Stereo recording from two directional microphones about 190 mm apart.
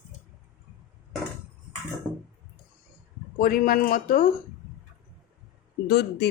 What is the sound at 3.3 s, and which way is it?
Speech, 50° left (ahead or behind).